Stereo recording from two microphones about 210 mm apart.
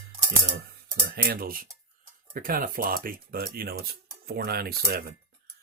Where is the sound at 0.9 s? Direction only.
50° right (ahead or behind).